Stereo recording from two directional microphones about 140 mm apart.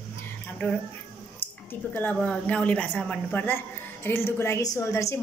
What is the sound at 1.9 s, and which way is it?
A woman's voice, 10° left (ahead or behind).